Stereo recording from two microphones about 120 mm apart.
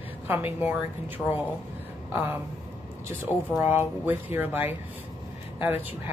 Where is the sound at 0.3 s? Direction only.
15° right (ahead or behind).